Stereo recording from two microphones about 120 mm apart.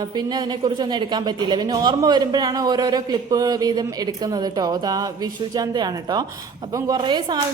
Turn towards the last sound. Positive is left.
turn(degrees=-40)  # may be behind; listen again after turning